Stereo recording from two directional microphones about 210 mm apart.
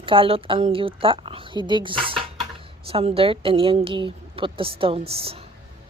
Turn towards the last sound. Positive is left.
turn(degrees=-25)  # may be behind; listen again after turning